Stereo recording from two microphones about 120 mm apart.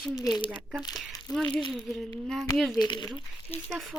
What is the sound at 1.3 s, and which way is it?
Speech, 5° left (ahead or behind).